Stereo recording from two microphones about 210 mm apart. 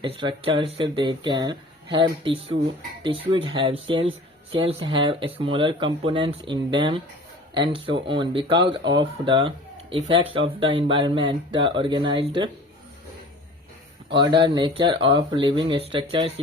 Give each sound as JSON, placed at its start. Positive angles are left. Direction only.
{"t": 0.0, "sound": "speech", "side_deg": -25}
{"t": 14.2, "sound": "speech", "side_deg": -20}